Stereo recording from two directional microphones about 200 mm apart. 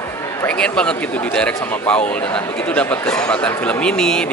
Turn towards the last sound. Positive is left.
turn(degrees=5)  # may be behind; listen again after turning